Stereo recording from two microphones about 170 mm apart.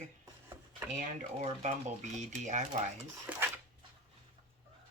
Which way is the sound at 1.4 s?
40° right (ahead or behind).